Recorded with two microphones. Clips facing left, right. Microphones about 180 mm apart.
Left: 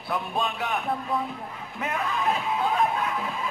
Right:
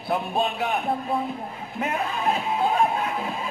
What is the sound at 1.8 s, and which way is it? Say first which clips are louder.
Speech: right 2 dB; 35° right (ahead or behind).